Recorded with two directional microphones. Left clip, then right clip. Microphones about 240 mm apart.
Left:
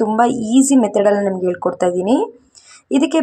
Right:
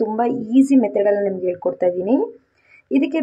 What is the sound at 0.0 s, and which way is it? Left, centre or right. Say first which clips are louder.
A woman's voice: left 5 dB; centre.